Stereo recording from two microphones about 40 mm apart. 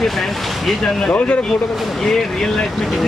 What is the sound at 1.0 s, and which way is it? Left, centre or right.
Speech, left.